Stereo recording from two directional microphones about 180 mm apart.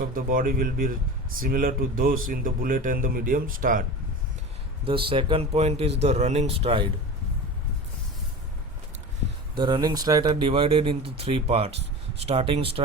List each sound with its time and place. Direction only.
0.1 s speech: 50° right (ahead or behind)
5.0 s speech: 30° right (ahead or behind)
9.6 s speech: 25° right (ahead or behind)